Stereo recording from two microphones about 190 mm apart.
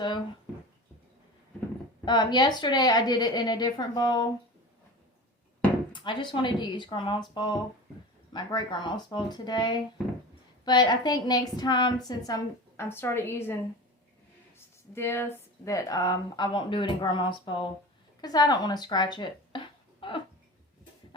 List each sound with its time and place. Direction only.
2.0 s a woman's voice: 20° left (ahead or behind)
5.9 s a woman's voice: 25° left (ahead or behind)
14.9 s a woman's voice: 15° left (ahead or behind)